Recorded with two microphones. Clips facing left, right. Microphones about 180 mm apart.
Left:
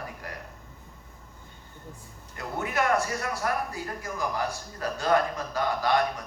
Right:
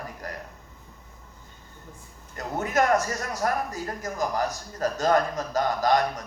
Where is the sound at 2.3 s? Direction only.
40° right (ahead or behind).